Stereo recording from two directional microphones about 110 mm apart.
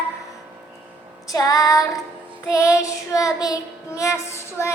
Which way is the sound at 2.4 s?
30° left (ahead or behind).